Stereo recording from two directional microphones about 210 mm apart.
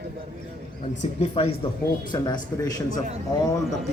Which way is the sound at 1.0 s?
30° left (ahead or behind).